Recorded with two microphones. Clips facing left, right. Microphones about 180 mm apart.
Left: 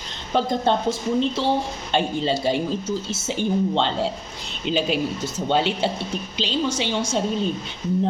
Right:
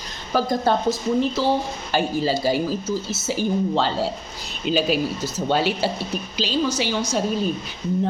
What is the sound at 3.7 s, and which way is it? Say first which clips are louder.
A woman's voice: even; 25° left (ahead or behind).